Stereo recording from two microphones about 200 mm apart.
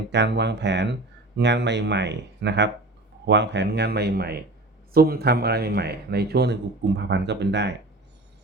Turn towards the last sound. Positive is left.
turn(degrees=-60)  # may be behind; listen again after turning